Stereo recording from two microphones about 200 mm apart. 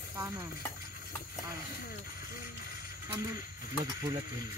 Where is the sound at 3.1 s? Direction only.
20° right (ahead or behind).